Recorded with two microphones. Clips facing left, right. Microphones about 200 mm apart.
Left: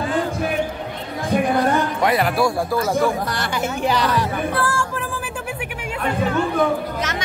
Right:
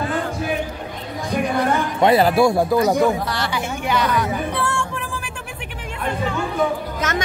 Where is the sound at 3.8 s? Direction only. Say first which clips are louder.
Even; 35° left (ahead or behind).